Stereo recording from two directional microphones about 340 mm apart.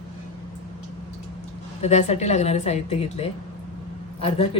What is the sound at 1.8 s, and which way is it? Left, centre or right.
Speech, centre.